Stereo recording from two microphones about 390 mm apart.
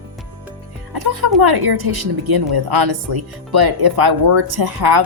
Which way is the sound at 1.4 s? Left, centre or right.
Right.